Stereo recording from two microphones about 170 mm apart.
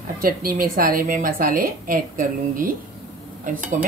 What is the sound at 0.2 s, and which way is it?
A woman's voice, 60° right (ahead or behind).